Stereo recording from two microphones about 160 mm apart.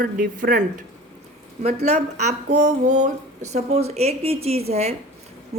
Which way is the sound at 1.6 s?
45° right (ahead or behind).